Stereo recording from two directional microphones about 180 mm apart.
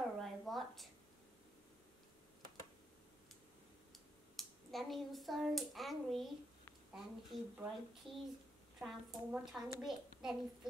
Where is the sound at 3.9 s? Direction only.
Centre (ahead or behind).